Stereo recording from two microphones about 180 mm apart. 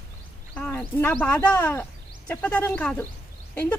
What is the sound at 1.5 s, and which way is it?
A woman's voice, 10° left (ahead or behind).